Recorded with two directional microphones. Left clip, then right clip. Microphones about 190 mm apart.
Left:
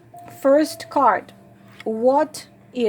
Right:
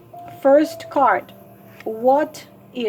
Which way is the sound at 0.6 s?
35° left (ahead or behind).